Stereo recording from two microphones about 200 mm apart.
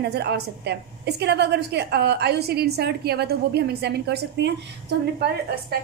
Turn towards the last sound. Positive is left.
turn(degrees=-55)  # may be behind; listen again after turning